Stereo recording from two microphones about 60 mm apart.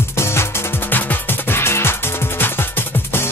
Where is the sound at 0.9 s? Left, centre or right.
Left.